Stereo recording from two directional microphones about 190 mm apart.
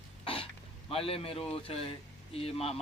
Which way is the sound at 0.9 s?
30° left (ahead or behind).